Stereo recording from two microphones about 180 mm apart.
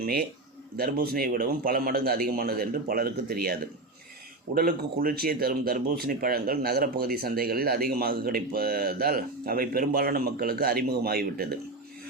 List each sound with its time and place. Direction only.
0.0 s speech: 55° right (ahead or behind)